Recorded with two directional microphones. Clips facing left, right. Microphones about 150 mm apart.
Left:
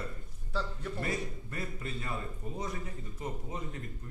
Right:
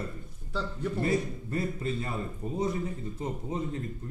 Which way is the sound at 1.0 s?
30° right (ahead or behind).